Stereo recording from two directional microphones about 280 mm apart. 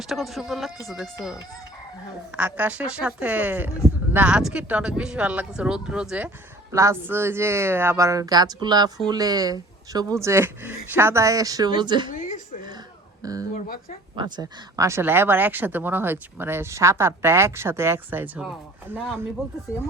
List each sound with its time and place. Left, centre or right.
0.0 s a woman's voice: centre
13.2 s speech: centre